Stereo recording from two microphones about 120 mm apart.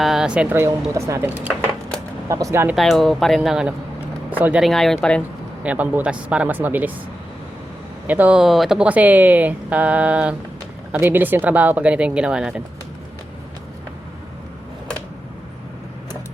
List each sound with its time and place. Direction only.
0.0 s a sound: 5° right (ahead or behind)
0.5 s speech: 25° right (ahead or behind)
2.3 s speech: 25° right (ahead or behind)
2.7 s speech: centre (ahead or behind); by 4.6 s 15° right (ahead or behind)
4.6 s speech: centre (ahead or behind)
5.6 s speech: 10° right (ahead or behind)
8.0 s speech: 15° right (ahead or behind)